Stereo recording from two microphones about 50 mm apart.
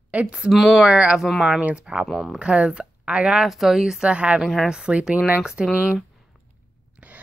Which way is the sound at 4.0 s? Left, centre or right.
Right.